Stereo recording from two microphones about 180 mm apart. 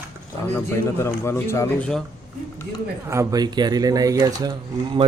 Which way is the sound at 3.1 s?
20° right (ahead or behind).